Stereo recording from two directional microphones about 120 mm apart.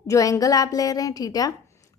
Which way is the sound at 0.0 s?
30° left (ahead or behind).